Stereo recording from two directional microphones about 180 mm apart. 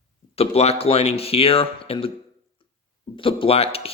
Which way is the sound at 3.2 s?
30° left (ahead or behind).